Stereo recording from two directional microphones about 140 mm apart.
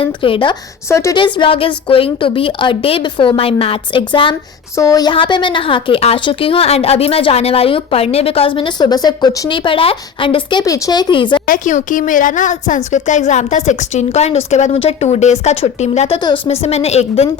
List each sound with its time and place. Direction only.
0.0 s a woman's voice: 40° left (ahead or behind)
0.9 s speech: 20° left (ahead or behind)
1.1 s a woman's voice: 35° left (ahead or behind)
4.7 s speech: 20° left (ahead or behind)
5.1 s a woman's voice: 35° left (ahead or behind)
9.5 s a woman's voice: 35° left (ahead or behind)
11.1 s a woman's voice: 35° left (ahead or behind)
11.4 s a woman's voice: 70° left (ahead or behind); by 16.1 s 50° left (ahead or behind)
16.1 s a woman's voice: 35° left (ahead or behind)